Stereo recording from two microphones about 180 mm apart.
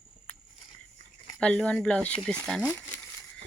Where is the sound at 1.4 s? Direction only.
5° left (ahead or behind).